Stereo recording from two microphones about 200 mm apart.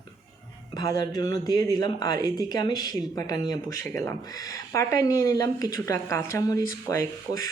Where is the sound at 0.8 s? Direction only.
20° left (ahead or behind).